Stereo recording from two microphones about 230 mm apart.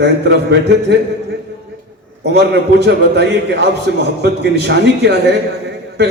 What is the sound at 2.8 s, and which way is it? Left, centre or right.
A man's voice, right.